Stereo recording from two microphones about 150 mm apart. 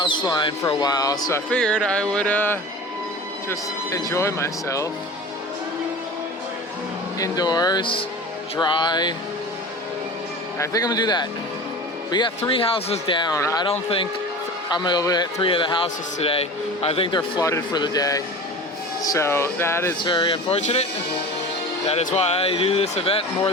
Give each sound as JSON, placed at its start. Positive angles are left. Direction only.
{"t": 0.3, "sound": "speech", "side_deg": 30}
{"t": 1.5, "sound": "speech", "side_deg": 5}
{"t": 7.2, "sound": "speech", "side_deg": 25}
{"t": 10.6, "sound": "speech", "side_deg": 20}
{"t": 12.4, "sound": "a man's voice", "side_deg": 40}
{"t": 13.7, "sound": "a man's voice", "side_deg": 40}
{"t": 14.7, "sound": "a man's voice", "side_deg": 30}
{"t": 20.1, "sound": "a man's voice", "side_deg": 35}
{"t": 20.6, "sound": "speech", "side_deg": 45}
{"t": 21.8, "sound": "speech", "side_deg": 45}